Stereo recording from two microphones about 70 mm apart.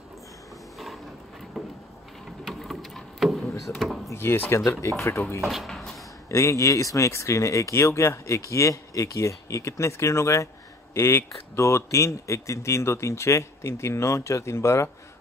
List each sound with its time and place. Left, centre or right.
2.4 s boat: centre
3.6 s drawer open or close: centre
4.1 s speech: left
5.4 s speech: centre
6.2 s speech: left